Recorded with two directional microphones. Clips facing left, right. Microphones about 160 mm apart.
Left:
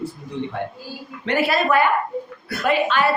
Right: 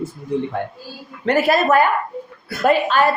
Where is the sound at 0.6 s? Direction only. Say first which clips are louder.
Right 1 dB; 45° right (ahead or behind).